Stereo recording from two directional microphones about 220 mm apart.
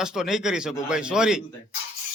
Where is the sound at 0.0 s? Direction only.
Centre (ahead or behind).